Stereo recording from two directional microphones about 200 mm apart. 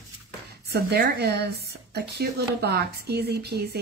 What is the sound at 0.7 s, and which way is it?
Speech, 55° right (ahead or behind).